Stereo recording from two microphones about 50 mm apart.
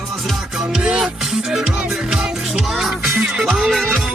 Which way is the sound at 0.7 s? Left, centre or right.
Centre.